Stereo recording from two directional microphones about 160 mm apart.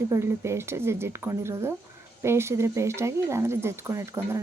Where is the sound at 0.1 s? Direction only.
15° right (ahead or behind).